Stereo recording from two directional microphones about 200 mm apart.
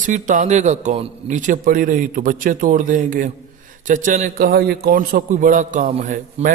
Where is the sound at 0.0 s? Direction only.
40° right (ahead or behind).